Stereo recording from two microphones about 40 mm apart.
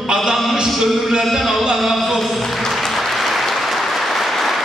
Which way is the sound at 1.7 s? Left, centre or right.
Centre.